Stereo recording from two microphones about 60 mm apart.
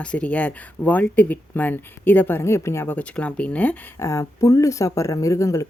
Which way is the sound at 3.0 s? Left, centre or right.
Centre.